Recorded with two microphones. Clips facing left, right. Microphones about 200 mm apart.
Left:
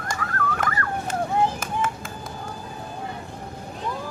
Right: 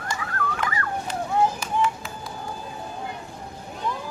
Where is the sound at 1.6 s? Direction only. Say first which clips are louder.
Right 2 dB; 50° left (ahead or behind).